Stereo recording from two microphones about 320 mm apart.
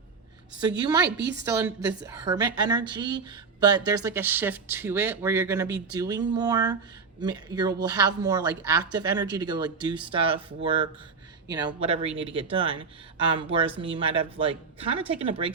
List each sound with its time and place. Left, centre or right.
0.8 s speech: centre
1.1 s a woman's voice: right
1.5 s speech: centre